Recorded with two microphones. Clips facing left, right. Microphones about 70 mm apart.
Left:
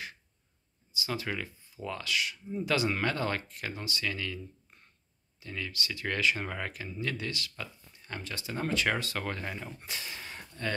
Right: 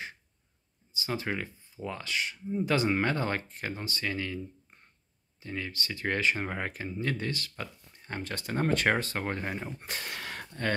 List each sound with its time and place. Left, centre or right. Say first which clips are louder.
0.9 s speech: right 2 dB; right
5.4 s speech: right 1 dB; right
9.8 s speech: right 3 dB; right
10.1 s a sound: right 5 dB; right